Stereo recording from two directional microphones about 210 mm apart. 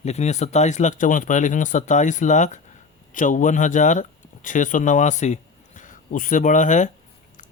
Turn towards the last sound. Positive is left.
turn(degrees=35)  # may be behind; listen again after turning